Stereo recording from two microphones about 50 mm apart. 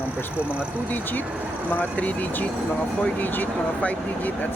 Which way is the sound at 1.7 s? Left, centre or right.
Left.